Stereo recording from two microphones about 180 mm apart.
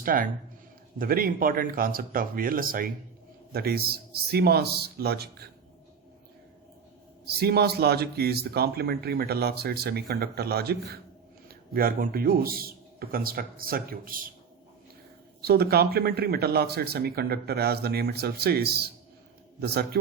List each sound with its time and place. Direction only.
0.0 s speech: 50° right (ahead or behind)
7.3 s speech: 60° right (ahead or behind)
15.4 s speech: 60° right (ahead or behind)